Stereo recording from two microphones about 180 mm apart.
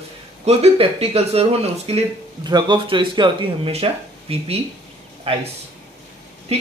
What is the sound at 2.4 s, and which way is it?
Speech, 25° right (ahead or behind).